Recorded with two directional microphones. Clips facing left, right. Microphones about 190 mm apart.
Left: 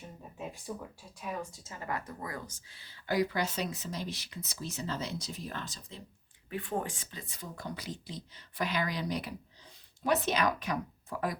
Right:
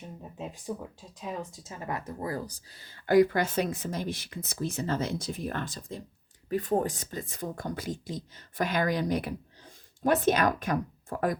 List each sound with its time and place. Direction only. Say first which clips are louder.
0.3 s speech: right 4 dB; 15° right (ahead or behind); by 6.0 s 55° right (ahead or behind)
6.5 s speech: right 8 dB; 40° right (ahead or behind)